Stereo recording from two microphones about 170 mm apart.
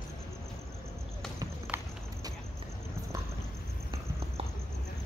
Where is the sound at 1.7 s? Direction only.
15° right (ahead or behind).